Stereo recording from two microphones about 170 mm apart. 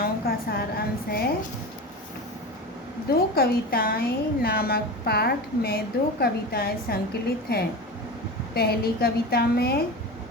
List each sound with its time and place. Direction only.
0.0 s a sound: 60° left (ahead or behind)
1.1 s a woman's voice: 60° left (ahead or behind)
3.1 s a woman's voice: 65° left (ahead or behind)